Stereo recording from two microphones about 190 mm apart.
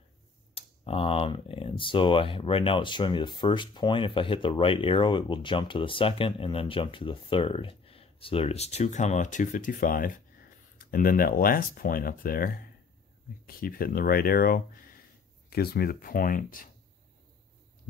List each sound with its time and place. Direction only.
0.6 s speech: 30° left (ahead or behind); by 16.6 s 45° left (ahead or behind)